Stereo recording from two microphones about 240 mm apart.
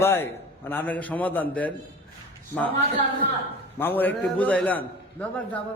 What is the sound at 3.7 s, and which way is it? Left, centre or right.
A man's voice, centre.